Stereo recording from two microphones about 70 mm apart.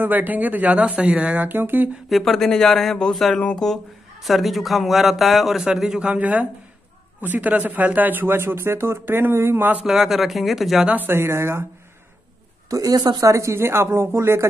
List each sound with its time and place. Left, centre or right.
0.0 s speech: right
2.0 s a man's voice: centre
3.3 s speech: centre
3.6 s a man's voice: centre
6.1 s speech: right
9.8 s a man's voice: centre
10.9 s speech: right
12.6 s speech: right
13.3 s speech: right